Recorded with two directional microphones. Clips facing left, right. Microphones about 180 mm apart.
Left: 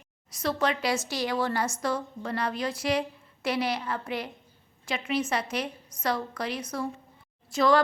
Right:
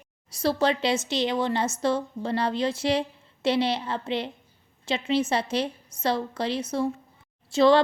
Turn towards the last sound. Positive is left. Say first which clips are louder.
# right 4 dB
turn(degrees=-25)  # may be behind; listen again after turning